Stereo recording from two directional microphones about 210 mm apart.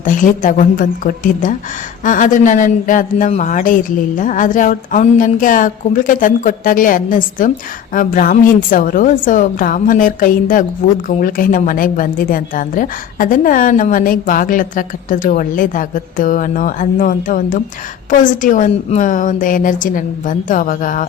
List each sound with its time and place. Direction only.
0.0 s a woman's voice: 40° left (ahead or behind)